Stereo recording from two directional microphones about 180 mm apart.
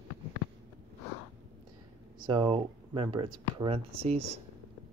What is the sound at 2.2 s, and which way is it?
Speech, 30° right (ahead or behind).